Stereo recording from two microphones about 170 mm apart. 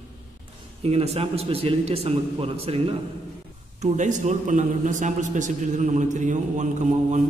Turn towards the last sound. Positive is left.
turn(degrees=-45)  # may be behind; listen again after turning